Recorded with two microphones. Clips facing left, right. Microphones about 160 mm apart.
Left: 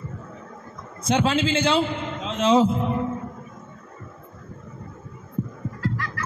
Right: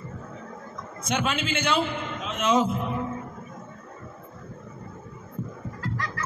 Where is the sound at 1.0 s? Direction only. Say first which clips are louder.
Left 6 dB; 30° left (ahead or behind).